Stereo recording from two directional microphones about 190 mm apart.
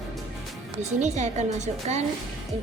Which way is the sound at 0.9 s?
40° right (ahead or behind).